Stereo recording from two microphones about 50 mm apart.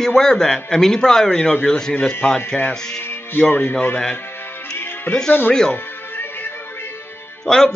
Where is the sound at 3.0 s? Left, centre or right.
Left.